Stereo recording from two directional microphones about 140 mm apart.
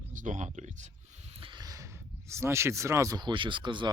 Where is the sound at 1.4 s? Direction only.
30° right (ahead or behind).